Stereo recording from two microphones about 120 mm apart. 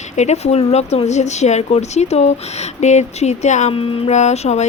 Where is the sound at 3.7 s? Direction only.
50° left (ahead or behind).